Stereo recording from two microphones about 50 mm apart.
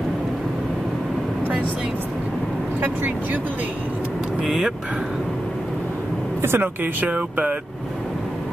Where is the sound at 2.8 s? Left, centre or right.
Right.